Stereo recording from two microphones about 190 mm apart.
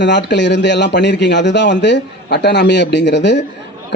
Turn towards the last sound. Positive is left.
turn(degrees=65)  # may be behind; listen again after turning